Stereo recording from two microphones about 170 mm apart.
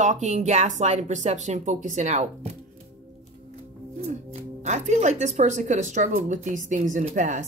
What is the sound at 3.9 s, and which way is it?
Speech, 40° right (ahead or behind).